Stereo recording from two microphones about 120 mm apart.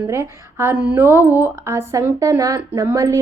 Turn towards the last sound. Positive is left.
turn(degrees=-25)  # may be behind; listen again after turning